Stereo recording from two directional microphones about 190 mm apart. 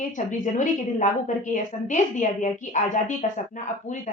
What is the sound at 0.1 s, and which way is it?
A woman's voice, 40° left (ahead or behind).